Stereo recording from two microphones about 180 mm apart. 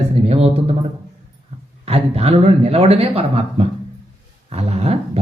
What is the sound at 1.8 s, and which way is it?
Speech, 35° right (ahead or behind).